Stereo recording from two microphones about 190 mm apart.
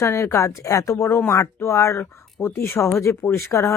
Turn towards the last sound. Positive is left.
turn(degrees=15)  # may be behind; listen again after turning